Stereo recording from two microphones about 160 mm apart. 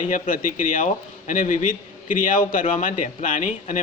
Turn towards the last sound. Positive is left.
turn(degrees=50)  # may be behind; listen again after turning